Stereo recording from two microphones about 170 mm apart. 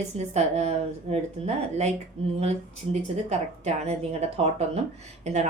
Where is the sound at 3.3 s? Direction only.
40° right (ahead or behind).